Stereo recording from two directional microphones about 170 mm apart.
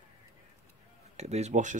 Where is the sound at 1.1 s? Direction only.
40° right (ahead or behind).